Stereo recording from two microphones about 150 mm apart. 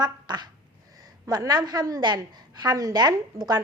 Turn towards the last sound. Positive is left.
turn(degrees=-25)  # may be behind; listen again after turning